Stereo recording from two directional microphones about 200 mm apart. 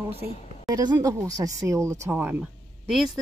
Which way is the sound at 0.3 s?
35° left (ahead or behind).